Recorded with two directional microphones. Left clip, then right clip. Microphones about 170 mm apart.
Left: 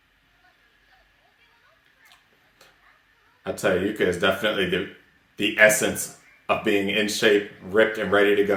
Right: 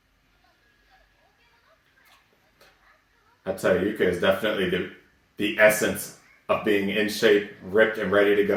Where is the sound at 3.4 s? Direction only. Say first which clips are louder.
Even; 25° left (ahead or behind).